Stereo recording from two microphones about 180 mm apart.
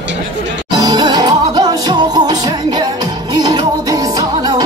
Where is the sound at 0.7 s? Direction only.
20° right (ahead or behind).